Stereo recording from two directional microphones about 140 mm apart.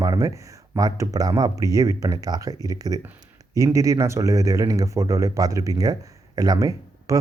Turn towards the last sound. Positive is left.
turn(degrees=-25)  # may be behind; listen again after turning